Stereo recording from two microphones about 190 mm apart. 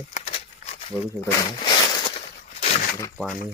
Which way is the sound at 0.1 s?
35° left (ahead or behind).